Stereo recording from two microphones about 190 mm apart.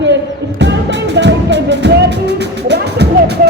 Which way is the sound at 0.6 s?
65° right (ahead or behind).